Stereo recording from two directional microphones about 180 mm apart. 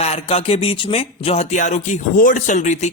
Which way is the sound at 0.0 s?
35° left (ahead or behind).